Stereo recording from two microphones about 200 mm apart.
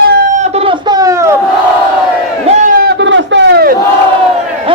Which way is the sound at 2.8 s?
60° right (ahead or behind).